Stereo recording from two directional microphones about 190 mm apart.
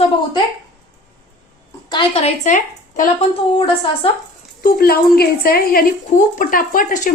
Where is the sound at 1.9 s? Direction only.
25° left (ahead or behind).